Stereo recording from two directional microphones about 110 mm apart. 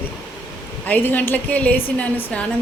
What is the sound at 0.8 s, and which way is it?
A woman's voice, 15° left (ahead or behind).